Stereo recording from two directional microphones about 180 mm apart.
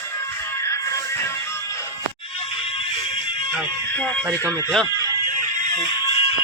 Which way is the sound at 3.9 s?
10° left (ahead or behind).